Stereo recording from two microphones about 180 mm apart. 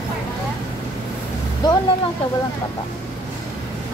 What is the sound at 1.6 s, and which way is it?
Vehicle, 25° left (ahead or behind).